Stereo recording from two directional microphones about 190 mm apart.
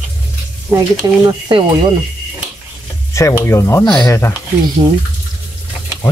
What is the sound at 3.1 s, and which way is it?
Speech, 15° left (ahead or behind).